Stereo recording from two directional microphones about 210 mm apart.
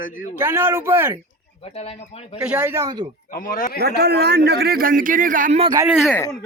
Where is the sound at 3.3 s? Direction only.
40° left (ahead or behind).